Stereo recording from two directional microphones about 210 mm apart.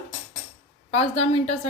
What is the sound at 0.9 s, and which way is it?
Speech, 30° left (ahead or behind).